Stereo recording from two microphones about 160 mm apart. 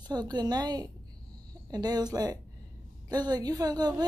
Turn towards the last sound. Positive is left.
turn(degrees=-25)  # may be behind; listen again after turning